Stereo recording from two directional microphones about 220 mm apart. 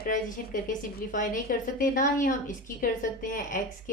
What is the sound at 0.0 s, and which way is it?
A woman's voice, 40° left (ahead or behind).